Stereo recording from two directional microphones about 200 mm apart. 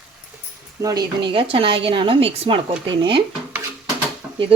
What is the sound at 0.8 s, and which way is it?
Speech, 20° right (ahead or behind).